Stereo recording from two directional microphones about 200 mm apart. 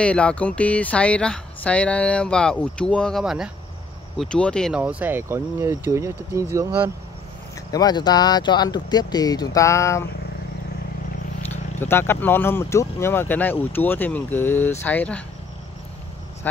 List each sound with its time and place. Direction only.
0.0 s speech: 5° left (ahead or behind); by 6.4 s 15° right (ahead or behind)
7.7 s speech: 20° left (ahead or behind)
11.5 s speech: 10° left (ahead or behind)